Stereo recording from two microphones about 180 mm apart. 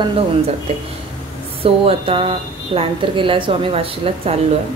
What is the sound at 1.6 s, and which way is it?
A woman's voice, 30° right (ahead or behind).